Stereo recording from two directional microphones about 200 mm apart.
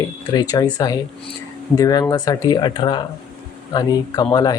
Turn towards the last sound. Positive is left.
turn(degrees=20)  # may be behind; listen again after turning